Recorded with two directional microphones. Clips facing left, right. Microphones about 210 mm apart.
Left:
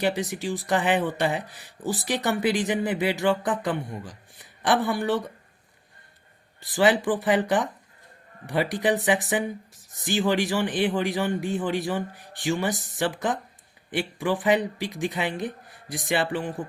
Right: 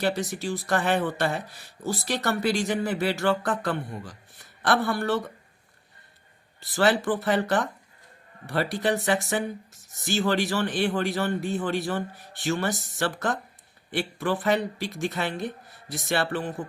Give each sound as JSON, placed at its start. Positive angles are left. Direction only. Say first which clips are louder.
{"t": 0.0, "sound": "speech", "louder": "left 1 dB", "side_deg": 15}
{"t": 6.7, "sound": "speech", "louder": "left 2 dB", "side_deg": 15}